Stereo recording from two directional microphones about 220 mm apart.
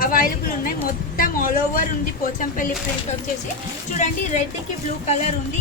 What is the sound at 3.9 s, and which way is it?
Speech, 35° left (ahead or behind).